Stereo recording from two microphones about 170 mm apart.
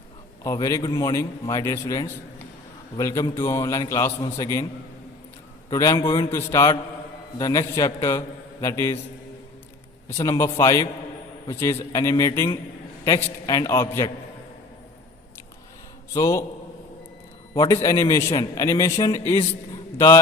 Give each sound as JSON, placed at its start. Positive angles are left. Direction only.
{"t": 0.4, "sound": "a man's voice", "side_deg": 20}
{"t": 5.7, "sound": "a man's voice", "side_deg": 20}
{"t": 10.2, "sound": "a man's voice", "side_deg": 15}
{"t": 16.1, "sound": "a man's voice", "side_deg": 20}
{"t": 17.8, "sound": "a man's voice", "side_deg": 20}